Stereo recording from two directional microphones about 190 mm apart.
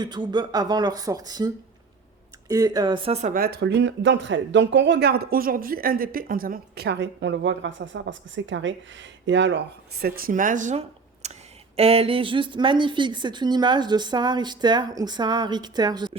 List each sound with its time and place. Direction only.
0.0 s a woman's voice: 25° right (ahead or behind)